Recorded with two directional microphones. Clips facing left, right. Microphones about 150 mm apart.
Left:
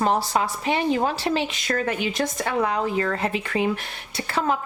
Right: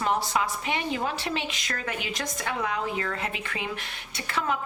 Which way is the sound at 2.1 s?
30° left (ahead or behind).